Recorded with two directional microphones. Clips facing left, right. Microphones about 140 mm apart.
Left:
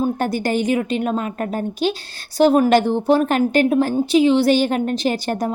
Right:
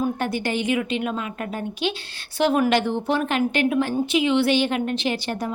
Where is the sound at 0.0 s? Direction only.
40° left (ahead or behind).